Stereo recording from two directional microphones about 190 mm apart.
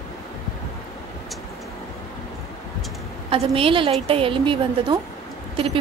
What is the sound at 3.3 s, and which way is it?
A woman's voice, 30° right (ahead or behind).